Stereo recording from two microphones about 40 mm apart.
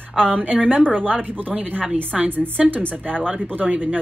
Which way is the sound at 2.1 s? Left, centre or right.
Centre.